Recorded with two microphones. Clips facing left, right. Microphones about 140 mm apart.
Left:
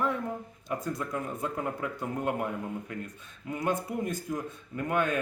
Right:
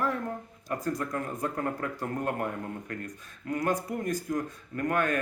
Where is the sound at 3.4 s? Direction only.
25° left (ahead or behind).